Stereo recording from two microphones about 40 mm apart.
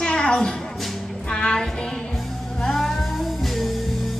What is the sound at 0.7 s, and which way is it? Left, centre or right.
Music, centre.